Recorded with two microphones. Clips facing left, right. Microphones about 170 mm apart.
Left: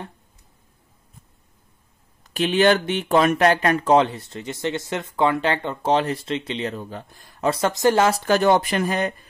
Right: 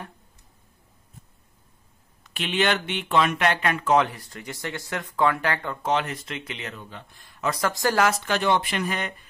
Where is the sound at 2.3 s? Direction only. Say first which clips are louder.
Left 7 dB; 40° left (ahead or behind).